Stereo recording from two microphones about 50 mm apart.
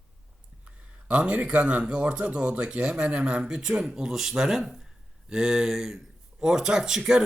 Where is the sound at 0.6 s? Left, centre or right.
Right.